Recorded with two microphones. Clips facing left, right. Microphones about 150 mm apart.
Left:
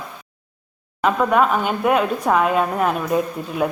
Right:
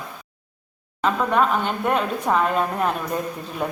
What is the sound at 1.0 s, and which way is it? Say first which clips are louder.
A woman's voice: left 3 dB; 10° left (ahead or behind).